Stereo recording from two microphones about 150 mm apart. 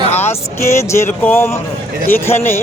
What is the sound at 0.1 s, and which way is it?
A man's voice, 15° left (ahead or behind).